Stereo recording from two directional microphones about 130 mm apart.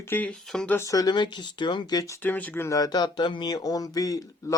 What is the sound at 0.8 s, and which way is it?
Speech, 25° left (ahead or behind).